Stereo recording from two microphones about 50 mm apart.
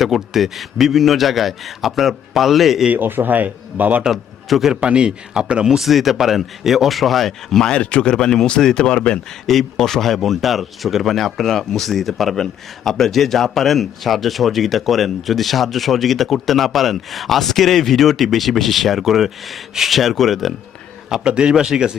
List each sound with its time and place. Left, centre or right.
0.0 s speech: centre
2.9 s speech: right
4.0 s a man's voice: centre
4.7 s a man's voice: centre
5.6 s speech: centre
7.7 s speech: left
9.5 s speech: centre
21.2 s a man's voice: centre